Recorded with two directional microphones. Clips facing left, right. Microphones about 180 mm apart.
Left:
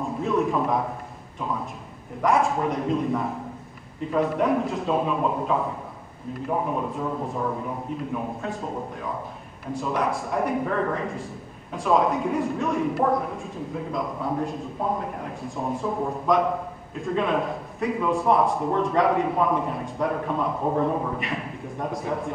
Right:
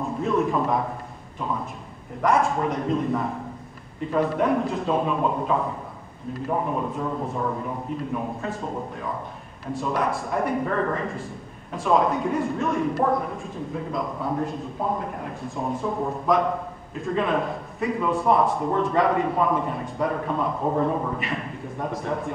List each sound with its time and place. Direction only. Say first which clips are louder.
0.0 s a man's voice: right 1 dB; centre (ahead or behind)